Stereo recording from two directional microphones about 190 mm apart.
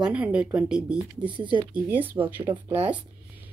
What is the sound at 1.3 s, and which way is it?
Speech, 25° right (ahead or behind).